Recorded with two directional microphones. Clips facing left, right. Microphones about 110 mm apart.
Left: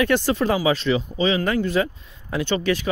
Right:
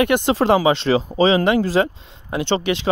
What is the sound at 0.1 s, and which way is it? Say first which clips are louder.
Speech: right 2 dB; 15° right (ahead or behind).